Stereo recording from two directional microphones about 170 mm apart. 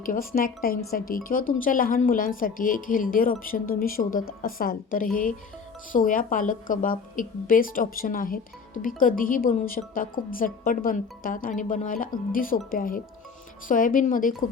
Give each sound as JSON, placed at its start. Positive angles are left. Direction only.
{"t": 0.0, "sound": "a woman's voice", "side_deg": 55}